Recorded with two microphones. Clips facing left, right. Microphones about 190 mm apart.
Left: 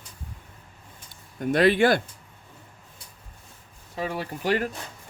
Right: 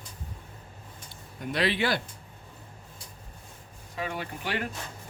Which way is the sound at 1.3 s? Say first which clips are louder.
Left 8 dB; 50° left (ahead or behind).